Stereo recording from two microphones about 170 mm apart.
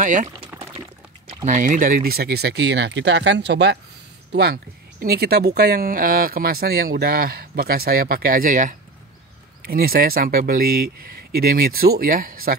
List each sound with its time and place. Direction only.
0.0 s speech: 45° right (ahead or behind)
0.5 s water: 10° right (ahead or behind)
1.3 s speech: 45° right (ahead or behind); by 3.8 s 90° right
4.3 s speech: 70° right (ahead or behind); by 8.7 s 50° right (ahead or behind)
9.7 s speech: 60° right (ahead or behind)